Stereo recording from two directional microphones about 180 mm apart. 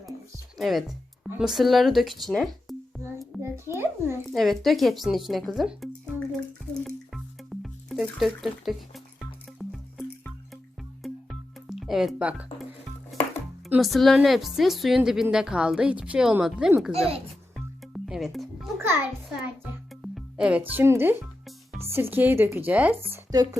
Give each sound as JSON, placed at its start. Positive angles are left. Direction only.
{"t": 0.5, "sound": "music", "side_deg": 0}
{"t": 1.5, "sound": "a woman's voice", "side_deg": 0}
{"t": 3.4, "sound": "a sound", "side_deg": -15}
{"t": 4.3, "sound": "speech", "side_deg": 0}
{"t": 6.8, "sound": "music", "side_deg": 0}
{"t": 13.7, "sound": "a woman's voice", "side_deg": 0}
{"t": 17.9, "sound": "music", "side_deg": 0}
{"t": 18.8, "sound": "a child's voice", "side_deg": -15}
{"t": 20.0, "sound": "speech", "side_deg": 0}
{"t": 23.3, "sound": "speech", "side_deg": -20}